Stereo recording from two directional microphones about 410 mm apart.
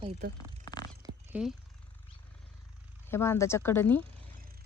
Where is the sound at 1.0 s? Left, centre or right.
Centre.